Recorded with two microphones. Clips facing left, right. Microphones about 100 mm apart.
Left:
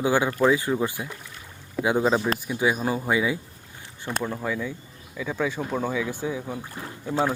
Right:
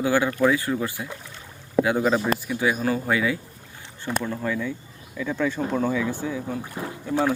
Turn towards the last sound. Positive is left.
turn(degrees=20)  # may be behind; listen again after turning